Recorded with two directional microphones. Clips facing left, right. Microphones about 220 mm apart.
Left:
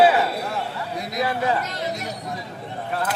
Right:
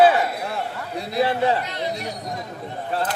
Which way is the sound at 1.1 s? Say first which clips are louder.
Right 3 dB; 30° right (ahead or behind).